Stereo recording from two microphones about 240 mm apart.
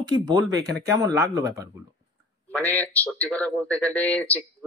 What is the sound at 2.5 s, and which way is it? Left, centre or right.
A man's voice, centre.